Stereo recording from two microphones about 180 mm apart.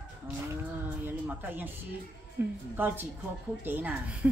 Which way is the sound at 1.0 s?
10° right (ahead or behind).